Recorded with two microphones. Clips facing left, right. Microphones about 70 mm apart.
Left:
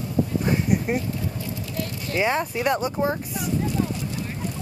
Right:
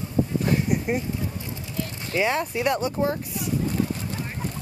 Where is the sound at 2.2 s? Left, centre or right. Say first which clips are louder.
Left 1 dB; centre.